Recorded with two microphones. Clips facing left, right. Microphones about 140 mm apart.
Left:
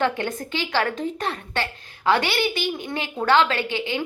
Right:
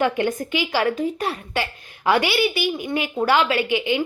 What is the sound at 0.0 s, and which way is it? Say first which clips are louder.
A woman's voice: right 3 dB; 15° right (ahead or behind).